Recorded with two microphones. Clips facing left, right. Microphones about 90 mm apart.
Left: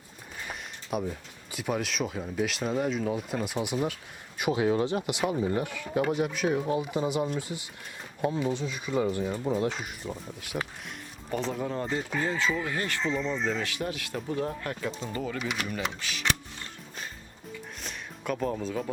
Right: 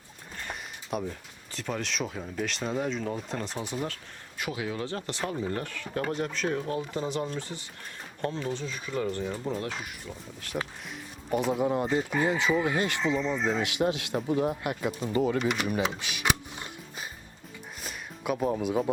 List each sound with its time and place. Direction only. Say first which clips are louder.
0.4 s a sound: right 1 dB; 5° left (ahead or behind)
1.5 s speech: left 2 dB; 10° left (ahead or behind)
4.6 s speech: left 9 dB; 35° left (ahead or behind)
4.9 s speech: left 4 dB; 15° left (ahead or behind)
10.5 s speech: even; 5° right (ahead or behind)
11.3 s speech: right 5 dB; 15° right (ahead or behind)
15.1 s speech: right 7 dB; 25° right (ahead or behind)
15.4 s speech: right 5 dB; centre (ahead or behind)
16.0 s music: right 2 dB; 15° right (ahead or behind)